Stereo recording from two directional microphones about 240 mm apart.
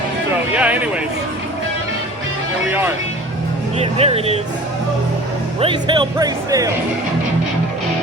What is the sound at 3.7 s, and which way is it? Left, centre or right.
Speech, right.